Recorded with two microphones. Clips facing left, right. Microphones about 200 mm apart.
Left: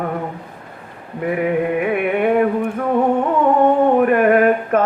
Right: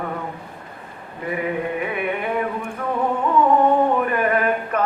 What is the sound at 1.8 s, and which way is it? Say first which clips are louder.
Music: left 7 dB; 55° left (ahead or behind).